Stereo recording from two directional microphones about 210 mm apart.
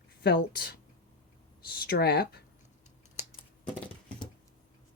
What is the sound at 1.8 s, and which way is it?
Speech, 50° left (ahead or behind).